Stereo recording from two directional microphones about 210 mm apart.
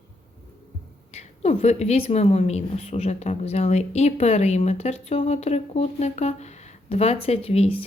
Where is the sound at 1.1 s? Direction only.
30° left (ahead or behind).